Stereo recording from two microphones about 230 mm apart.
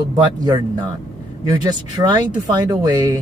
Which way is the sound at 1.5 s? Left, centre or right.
Centre.